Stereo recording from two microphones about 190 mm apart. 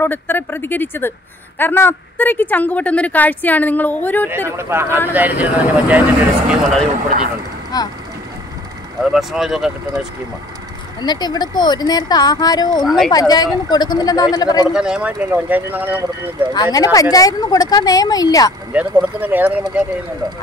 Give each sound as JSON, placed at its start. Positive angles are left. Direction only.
{"t": 0.0, "sound": "a woman's voice", "side_deg": 10}
{"t": 4.3, "sound": "speech", "side_deg": -15}
{"t": 7.7, "sound": "speech", "side_deg": 20}
{"t": 9.0, "sound": "speech", "side_deg": 0}
{"t": 11.0, "sound": "speech", "side_deg": 20}
{"t": 12.8, "sound": "speech", "side_deg": 0}
{"t": 13.1, "sound": "speech", "side_deg": 20}
{"t": 14.7, "sound": "speech", "side_deg": -5}
{"t": 16.7, "sound": "speech", "side_deg": 20}
{"t": 18.7, "sound": "speech", "side_deg": -10}